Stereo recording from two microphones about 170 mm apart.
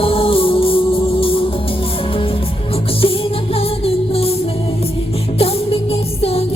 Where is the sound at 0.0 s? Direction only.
30° left (ahead or behind).